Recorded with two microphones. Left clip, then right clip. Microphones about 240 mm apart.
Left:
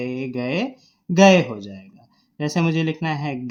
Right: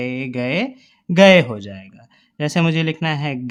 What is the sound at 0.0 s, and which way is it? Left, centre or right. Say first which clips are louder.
Speech: right 3 dB; right.